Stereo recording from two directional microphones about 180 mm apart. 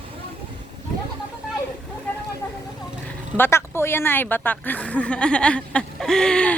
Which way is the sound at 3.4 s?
15° left (ahead or behind).